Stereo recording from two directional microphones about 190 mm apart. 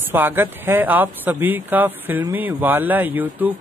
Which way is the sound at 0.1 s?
10° right (ahead or behind).